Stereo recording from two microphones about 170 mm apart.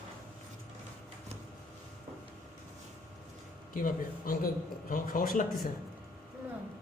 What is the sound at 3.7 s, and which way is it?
Speech, 55° left (ahead or behind).